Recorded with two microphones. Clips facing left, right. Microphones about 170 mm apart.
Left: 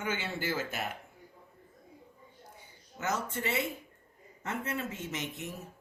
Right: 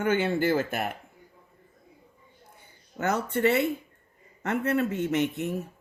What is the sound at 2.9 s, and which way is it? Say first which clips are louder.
Speech: right 7 dB; 60° right (ahead or behind).